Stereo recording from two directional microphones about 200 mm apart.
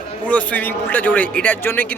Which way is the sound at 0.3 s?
5° left (ahead or behind).